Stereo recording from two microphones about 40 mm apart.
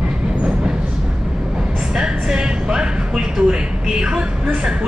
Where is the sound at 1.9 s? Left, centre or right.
Centre.